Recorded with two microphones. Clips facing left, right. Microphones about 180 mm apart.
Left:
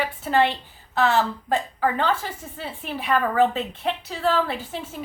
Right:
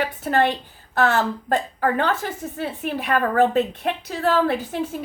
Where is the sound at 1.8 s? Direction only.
55° right (ahead or behind).